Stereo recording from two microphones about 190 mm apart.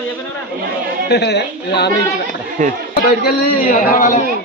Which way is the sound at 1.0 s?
60° left (ahead or behind).